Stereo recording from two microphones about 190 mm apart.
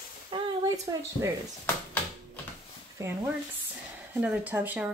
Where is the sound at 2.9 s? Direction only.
10° right (ahead or behind).